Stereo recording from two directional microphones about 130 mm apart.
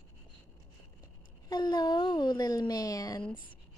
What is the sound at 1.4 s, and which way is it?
A woman's voice, 35° left (ahead or behind).